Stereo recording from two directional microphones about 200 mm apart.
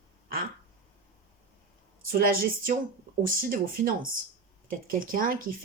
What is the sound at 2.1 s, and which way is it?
Speech, 45° right (ahead or behind).